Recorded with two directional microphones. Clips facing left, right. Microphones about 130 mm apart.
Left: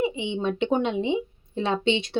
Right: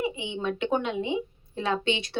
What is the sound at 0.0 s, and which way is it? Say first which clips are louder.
A woman's voice: left 4 dB; 25° left (ahead or behind).